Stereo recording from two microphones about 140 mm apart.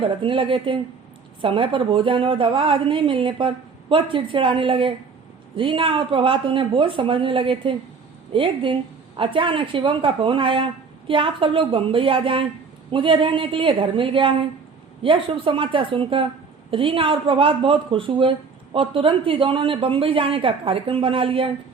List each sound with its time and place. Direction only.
0.0 s speech: 40° right (ahead or behind)